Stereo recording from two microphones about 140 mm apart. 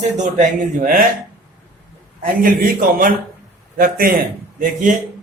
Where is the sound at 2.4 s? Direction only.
85° right.